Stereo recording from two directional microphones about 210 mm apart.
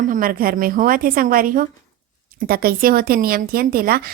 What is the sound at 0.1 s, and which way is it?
A woman's voice, 40° right (ahead or behind).